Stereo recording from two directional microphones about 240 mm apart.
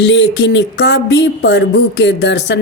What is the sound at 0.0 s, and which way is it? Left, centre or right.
Speech, left.